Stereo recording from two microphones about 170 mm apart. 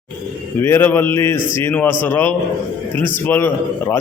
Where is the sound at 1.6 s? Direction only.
10° left (ahead or behind).